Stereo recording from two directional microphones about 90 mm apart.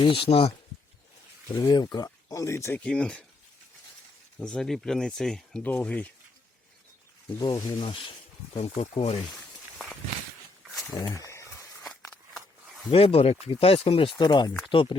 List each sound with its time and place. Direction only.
0.0 s speech: 85° left
1.5 s speech: 50° left (ahead or behind)
2.0 s speech: 35° left (ahead or behind)
2.7 s speech: 10° left (ahead or behind)
4.4 s speech: 5° left (ahead or behind)
5.6 s speech: 15° left (ahead or behind)
7.8 s speech: 70° left (ahead or behind)
8.5 s speech: 90° left
10.9 s speech: 40° left (ahead or behind)
11.9 s a sound: centre (ahead or behind)
12.9 s speech: 90° left
14.2 s speech: 50° left (ahead or behind)
14.7 s speech: 70° left (ahead or behind)